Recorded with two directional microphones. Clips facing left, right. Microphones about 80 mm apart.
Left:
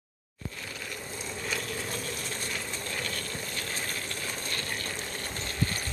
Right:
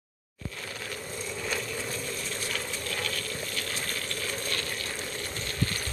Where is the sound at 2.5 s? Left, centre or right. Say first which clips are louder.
Right 2 dB; left.